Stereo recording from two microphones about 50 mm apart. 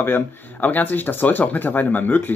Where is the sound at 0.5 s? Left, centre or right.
Left.